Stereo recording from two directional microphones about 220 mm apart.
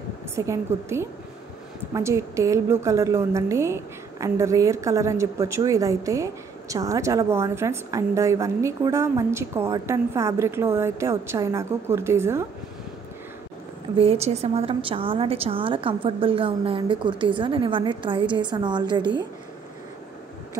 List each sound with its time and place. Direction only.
0.5 s a woman's voice: 10° right (ahead or behind)
13.9 s a woman's voice: 25° right (ahead or behind)